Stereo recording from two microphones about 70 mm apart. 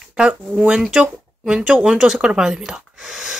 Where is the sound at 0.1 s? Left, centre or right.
Centre.